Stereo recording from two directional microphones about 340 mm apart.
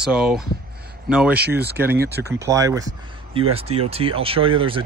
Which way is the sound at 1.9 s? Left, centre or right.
Right.